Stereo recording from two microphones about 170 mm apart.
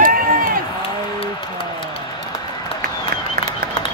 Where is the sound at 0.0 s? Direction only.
55° right (ahead or behind).